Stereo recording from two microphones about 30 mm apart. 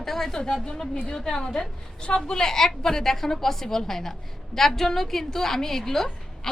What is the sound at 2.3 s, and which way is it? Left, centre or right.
A woman's voice, centre.